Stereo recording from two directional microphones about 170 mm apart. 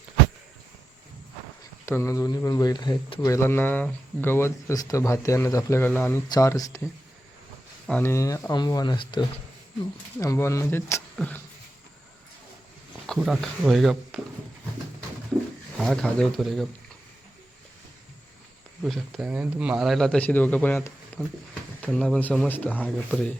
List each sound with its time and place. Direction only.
1.9 s speech: 15° left (ahead or behind)
7.9 s speech: 10° left (ahead or behind); by 9.2 s 25° left (ahead or behind)
10.2 s speech: 15° left (ahead or behind)
13.1 s a man's voice: centre (ahead or behind)
15.8 s a man's voice: 5° left (ahead or behind)
18.8 s a man's voice: centre (ahead or behind)